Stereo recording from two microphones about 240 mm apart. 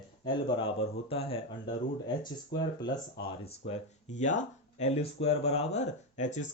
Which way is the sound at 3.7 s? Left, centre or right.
Left.